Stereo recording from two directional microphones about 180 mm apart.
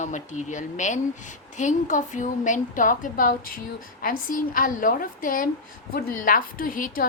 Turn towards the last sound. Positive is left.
turn(degrees=50)  # may be behind; listen again after turning